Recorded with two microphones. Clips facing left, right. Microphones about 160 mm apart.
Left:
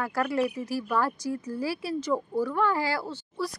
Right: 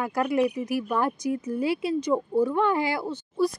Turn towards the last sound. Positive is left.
turn(degrees=-20)  # may be behind; listen again after turning